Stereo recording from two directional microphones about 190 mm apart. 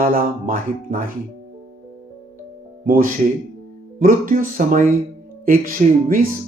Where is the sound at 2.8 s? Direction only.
50° right (ahead or behind).